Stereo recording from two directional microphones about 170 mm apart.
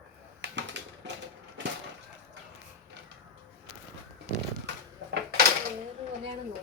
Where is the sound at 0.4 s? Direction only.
90° right.